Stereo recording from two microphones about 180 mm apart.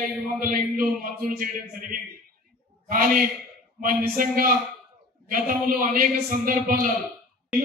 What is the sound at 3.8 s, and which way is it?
A man's voice, 50° right (ahead or behind).